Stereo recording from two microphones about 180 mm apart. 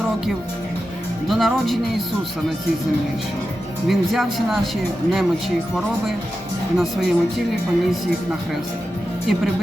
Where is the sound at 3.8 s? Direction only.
Centre (ahead or behind).